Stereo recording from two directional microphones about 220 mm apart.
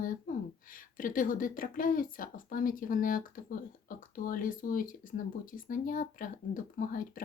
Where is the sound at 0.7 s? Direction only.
40° left (ahead or behind).